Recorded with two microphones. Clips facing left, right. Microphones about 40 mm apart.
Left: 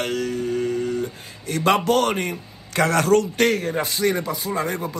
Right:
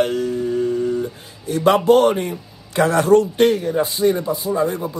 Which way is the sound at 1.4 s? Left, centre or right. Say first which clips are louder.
Right 4 dB; left.